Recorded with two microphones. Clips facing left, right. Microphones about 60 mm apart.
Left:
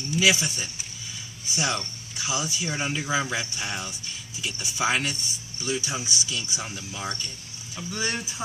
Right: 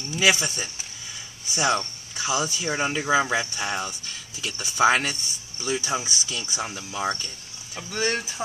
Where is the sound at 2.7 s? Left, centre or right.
Right.